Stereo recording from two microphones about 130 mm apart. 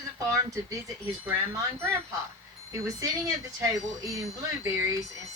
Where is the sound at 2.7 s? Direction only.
25° right (ahead or behind).